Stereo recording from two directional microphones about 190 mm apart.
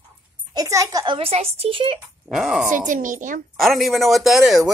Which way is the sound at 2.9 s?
45° right (ahead or behind).